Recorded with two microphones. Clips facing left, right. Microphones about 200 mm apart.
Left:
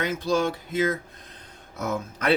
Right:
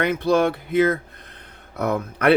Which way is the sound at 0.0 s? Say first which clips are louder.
Right 5 dB; 60° right (ahead or behind).